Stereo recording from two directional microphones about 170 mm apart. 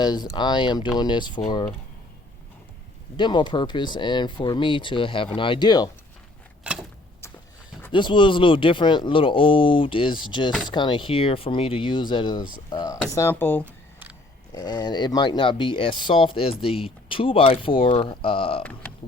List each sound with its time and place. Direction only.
0.0 s speech: 25° left (ahead or behind)
3.2 s speech: 25° left (ahead or behind)
6.7 s a sound: 5° right (ahead or behind)
7.9 s speech: 30° left (ahead or behind); by 13.7 s 10° left (ahead or behind)
13.7 s a sound: 10° right (ahead or behind)
14.5 s speech: 25° left (ahead or behind)
18.6 s speech: 10° left (ahead or behind)